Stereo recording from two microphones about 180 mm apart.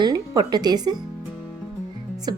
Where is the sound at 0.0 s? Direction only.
20° right (ahead or behind).